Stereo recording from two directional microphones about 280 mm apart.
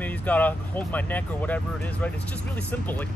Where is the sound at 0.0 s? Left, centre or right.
Centre.